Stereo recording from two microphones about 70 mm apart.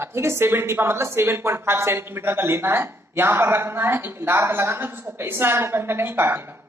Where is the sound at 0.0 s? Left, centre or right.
Right.